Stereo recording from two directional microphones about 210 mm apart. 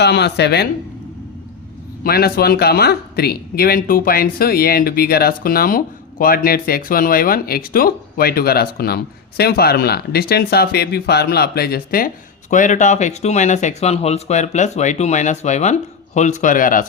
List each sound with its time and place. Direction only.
0.0 s speech: 55° left (ahead or behind)
2.0 s speech: 45° left (ahead or behind)